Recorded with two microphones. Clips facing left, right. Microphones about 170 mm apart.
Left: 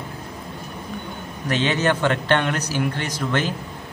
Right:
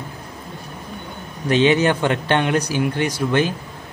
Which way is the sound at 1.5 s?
15° right (ahead or behind).